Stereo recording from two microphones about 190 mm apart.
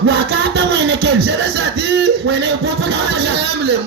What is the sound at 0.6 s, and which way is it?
Speech, 65° right (ahead or behind).